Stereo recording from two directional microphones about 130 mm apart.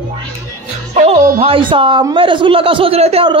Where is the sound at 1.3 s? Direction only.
45° right (ahead or behind).